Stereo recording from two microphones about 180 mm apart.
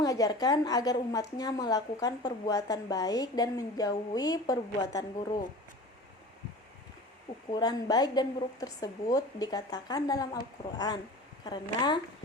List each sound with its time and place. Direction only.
0.0 s a woman's voice: 20° left (ahead or behind)
7.5 s a woman's voice: 20° left (ahead or behind)